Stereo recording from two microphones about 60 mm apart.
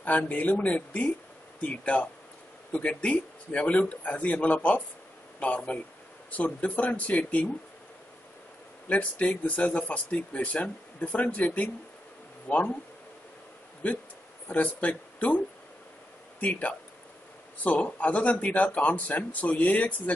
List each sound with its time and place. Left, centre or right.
0.0 s speech: left
8.8 s speech: left
14.5 s speech: left